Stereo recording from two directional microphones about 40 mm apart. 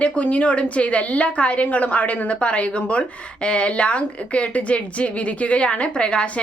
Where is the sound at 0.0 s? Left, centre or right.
Left.